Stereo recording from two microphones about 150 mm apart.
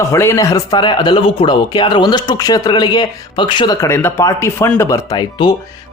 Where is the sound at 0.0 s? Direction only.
20° left (ahead or behind).